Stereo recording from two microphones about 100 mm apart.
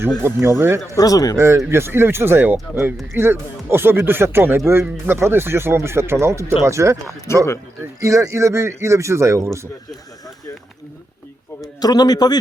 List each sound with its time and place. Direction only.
0.2 s speech: 25° right (ahead or behind)
0.9 s speech: 35° left (ahead or behind)
1.4 s speech: 30° right (ahead or behind)
7.3 s speech: 25° left (ahead or behind)
8.0 s speech: 30° right (ahead or behind)
11.6 s a man's voice: 40° left (ahead or behind)